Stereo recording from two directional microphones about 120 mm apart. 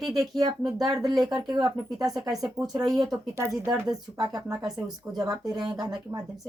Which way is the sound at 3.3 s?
20° right (ahead or behind).